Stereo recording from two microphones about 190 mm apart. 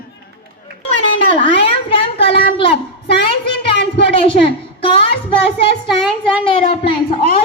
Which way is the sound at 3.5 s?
65° left (ahead or behind).